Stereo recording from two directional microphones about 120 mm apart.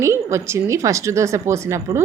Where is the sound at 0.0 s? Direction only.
25° right (ahead or behind).